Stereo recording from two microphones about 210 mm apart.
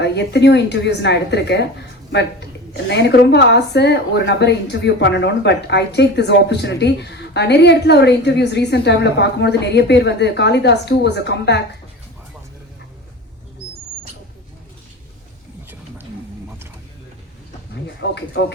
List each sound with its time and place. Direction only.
0.0 s a woman's voice: 55° left (ahead or behind)
2.9 s a woman's voice: 50° left (ahead or behind)
18.0 s a woman's voice: 55° left (ahead or behind)